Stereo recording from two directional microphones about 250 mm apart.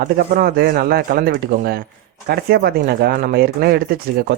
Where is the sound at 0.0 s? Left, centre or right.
Right.